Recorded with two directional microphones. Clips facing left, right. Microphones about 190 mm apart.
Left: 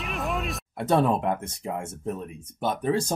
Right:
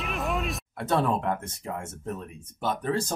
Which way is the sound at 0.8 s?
15° left (ahead or behind).